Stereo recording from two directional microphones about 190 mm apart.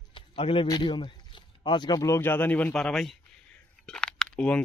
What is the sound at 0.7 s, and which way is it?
Speech, 25° left (ahead or behind).